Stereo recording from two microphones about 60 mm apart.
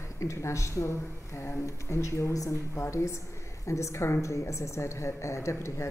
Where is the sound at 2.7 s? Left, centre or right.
Left.